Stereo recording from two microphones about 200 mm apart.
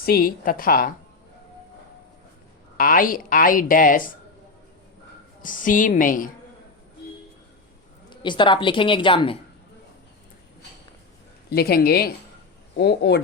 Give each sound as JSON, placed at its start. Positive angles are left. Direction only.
{"t": 0.0, "sound": "speech", "side_deg": 45}
{"t": 2.7, "sound": "speech", "side_deg": 45}
{"t": 5.4, "sound": "a woman's voice", "side_deg": 40}
{"t": 8.1, "sound": "a woman's voice", "side_deg": 25}
{"t": 11.4, "sound": "speech", "side_deg": 50}